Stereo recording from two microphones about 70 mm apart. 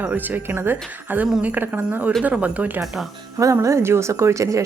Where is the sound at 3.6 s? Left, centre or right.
Right.